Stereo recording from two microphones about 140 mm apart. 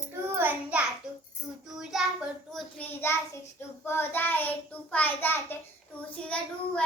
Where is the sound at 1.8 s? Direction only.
5° right (ahead or behind).